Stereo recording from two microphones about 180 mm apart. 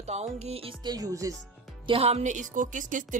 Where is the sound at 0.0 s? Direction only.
35° right (ahead or behind); by 1.4 s 20° right (ahead or behind).